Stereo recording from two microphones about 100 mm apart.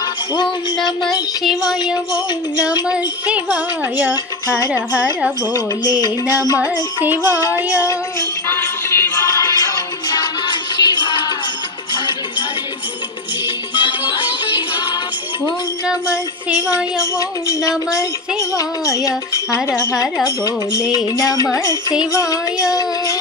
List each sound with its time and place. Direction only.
0.3 s music: 45° left (ahead or behind)
3.5 s music: 20° right (ahead or behind)
5.5 s music: 40° left (ahead or behind)
6.6 s music: 20° right (ahead or behind)
7.2 s music: 35° left (ahead or behind)
7.5 s a sound: 15° right (ahead or behind)
7.8 s music: 30° left (ahead or behind)
9.2 s music: 35° left (ahead or behind)
13.7 s music: 55° left (ahead or behind)
17.0 s music: 35° left (ahead or behind)